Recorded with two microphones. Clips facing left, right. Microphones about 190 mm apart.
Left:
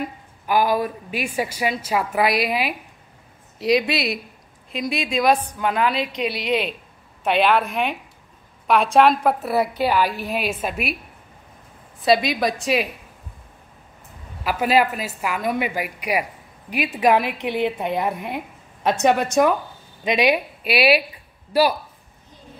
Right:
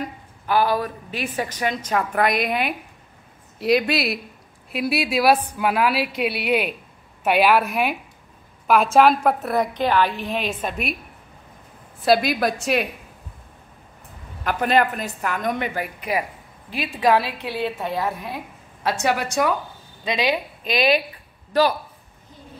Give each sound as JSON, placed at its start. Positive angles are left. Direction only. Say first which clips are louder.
{"t": 0.0, "sound": "a woman's voice", "louder": "left 1 dB", "side_deg": 10}
{"t": 12.0, "sound": "a woman's voice", "louder": "even", "side_deg": 0}
{"t": 14.4, "sound": "a woman's voice", "louder": "left 1 dB", "side_deg": 5}